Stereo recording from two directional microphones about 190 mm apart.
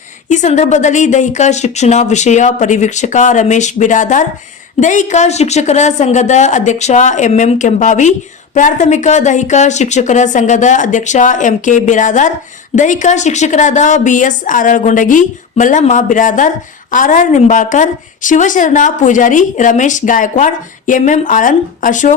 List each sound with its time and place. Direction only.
0.3 s a woman's voice: 40° left (ahead or behind)